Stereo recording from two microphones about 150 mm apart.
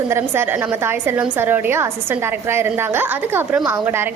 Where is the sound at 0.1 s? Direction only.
15° right (ahead or behind).